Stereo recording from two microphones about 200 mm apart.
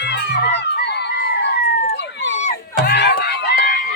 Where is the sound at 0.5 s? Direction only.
55° left (ahead or behind).